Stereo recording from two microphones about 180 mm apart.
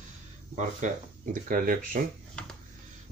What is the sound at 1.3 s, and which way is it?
Speech, 50° right (ahead or behind).